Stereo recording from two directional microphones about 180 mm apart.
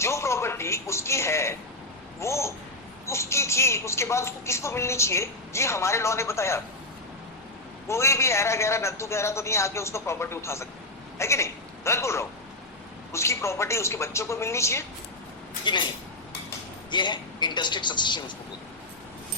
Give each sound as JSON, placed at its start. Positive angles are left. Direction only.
{"t": 0.0, "sound": "a sound", "side_deg": 15}
{"t": 2.2, "sound": "a woman's voice", "side_deg": 15}
{"t": 7.9, "sound": "a woman's voice", "side_deg": 15}
{"t": 15.6, "sound": "a man's voice", "side_deg": 25}
{"t": 16.9, "sound": "a man's voice", "side_deg": 25}